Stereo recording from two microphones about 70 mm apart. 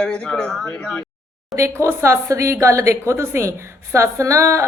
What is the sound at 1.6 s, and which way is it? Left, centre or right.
Speech, right.